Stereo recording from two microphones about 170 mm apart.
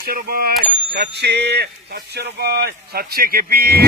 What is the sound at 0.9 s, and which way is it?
Speech, 75° right (ahead or behind).